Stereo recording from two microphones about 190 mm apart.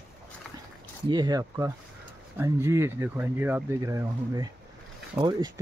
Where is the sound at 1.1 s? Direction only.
20° right (ahead or behind).